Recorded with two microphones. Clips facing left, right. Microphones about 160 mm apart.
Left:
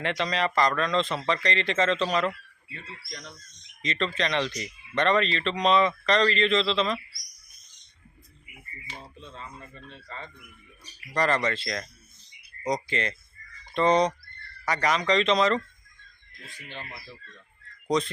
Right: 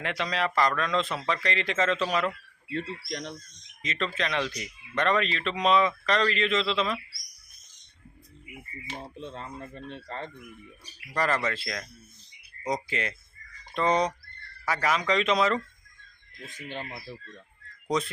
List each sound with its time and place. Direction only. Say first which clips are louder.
0.0 s speech: left 2 dB; 5° right (ahead or behind)
2.7 s speech: right 10 dB; 70° right (ahead or behind)
3.8 s speech: left 2 dB; 5° right (ahead or behind)
9.2 s speech: right 5 dB; 55° right (ahead or behind)
11.1 s speech: left 2 dB; 5° right (ahead or behind)
16.6 s speech: right 5 dB; 45° right (ahead or behind)
17.8 s speech: left 3 dB; 5° right (ahead or behind)